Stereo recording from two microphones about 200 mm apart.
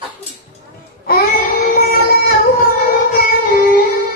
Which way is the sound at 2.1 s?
50° left (ahead or behind).